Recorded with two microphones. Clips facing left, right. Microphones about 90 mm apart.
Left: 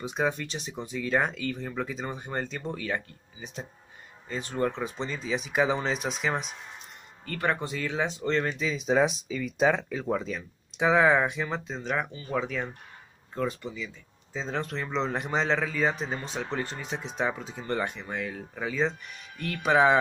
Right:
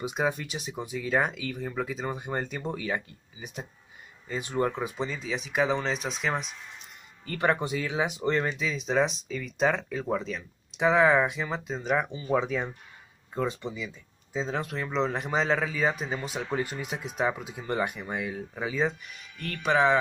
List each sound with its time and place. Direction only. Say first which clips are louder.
0.0 s speech: even; 10° right (ahead or behind)
7.3 s speech: right 3 dB; 20° right (ahead or behind)
8.5 s speech: left 2 dB; centre (ahead or behind); by 14.4 s 20° right (ahead or behind)
14.4 s speech: even; 5° right (ahead or behind)